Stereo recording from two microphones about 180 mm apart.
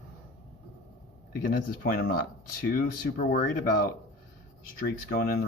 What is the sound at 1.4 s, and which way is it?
Speech, 55° left (ahead or behind).